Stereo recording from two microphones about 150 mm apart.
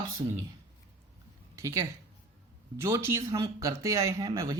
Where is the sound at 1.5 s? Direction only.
20° right (ahead or behind).